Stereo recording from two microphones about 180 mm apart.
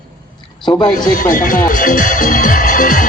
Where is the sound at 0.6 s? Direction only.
25° left (ahead or behind).